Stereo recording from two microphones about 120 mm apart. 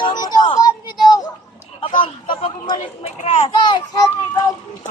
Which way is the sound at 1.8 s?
45° left (ahead or behind).